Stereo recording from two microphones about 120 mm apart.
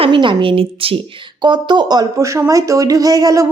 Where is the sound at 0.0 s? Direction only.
45° right (ahead or behind).